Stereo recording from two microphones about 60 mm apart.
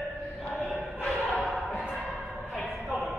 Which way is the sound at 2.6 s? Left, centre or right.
Centre.